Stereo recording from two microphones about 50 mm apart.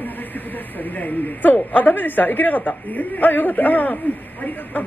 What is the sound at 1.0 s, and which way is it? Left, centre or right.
Speech, left.